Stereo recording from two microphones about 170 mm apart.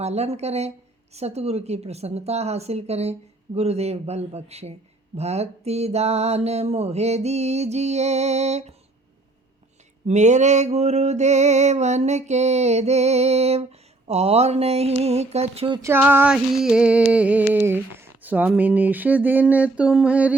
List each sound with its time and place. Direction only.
0.0 s a woman's voice: 40° right (ahead or behind)
10.1 s a woman's voice: 45° right (ahead or behind)
15.8 s a sound: 10° right (ahead or behind)